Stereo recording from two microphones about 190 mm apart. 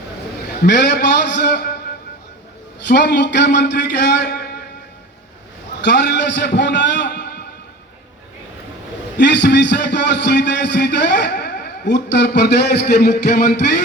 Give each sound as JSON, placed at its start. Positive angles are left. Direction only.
{"t": 0.6, "sound": "a man's voice", "side_deg": 65}
{"t": 2.8, "sound": "a man's voice", "side_deg": 60}
{"t": 5.8, "sound": "a man's voice", "side_deg": 65}
{"t": 9.1, "sound": "a man's voice", "side_deg": 65}